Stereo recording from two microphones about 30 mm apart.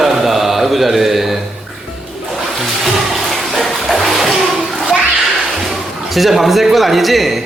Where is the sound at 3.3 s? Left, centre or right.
Centre.